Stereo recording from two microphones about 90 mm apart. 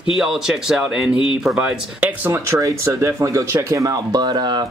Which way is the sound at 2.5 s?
30° right (ahead or behind).